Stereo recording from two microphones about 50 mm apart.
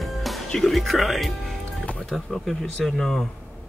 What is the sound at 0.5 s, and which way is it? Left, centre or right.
Speech, centre.